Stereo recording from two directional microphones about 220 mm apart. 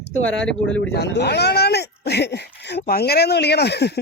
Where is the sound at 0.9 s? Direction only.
50° left (ahead or behind).